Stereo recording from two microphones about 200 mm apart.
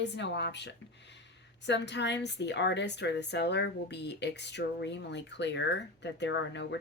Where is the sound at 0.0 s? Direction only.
60° left (ahead or behind).